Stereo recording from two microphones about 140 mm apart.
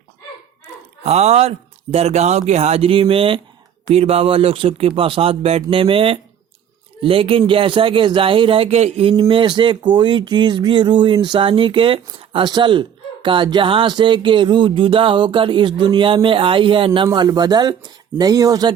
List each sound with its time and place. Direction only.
1.0 s speech: 50° right (ahead or behind)
9.3 s speech: 35° right (ahead or behind)